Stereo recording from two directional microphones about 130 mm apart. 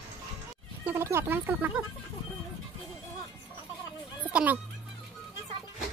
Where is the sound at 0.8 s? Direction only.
20° right (ahead or behind).